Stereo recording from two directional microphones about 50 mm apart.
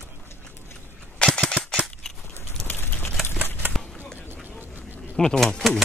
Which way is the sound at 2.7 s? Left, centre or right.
Left.